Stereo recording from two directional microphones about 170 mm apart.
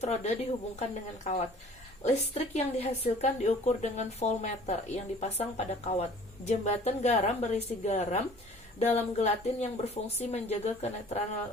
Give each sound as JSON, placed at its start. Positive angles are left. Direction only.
{"t": 0.0, "sound": "a woman's voice", "side_deg": 40}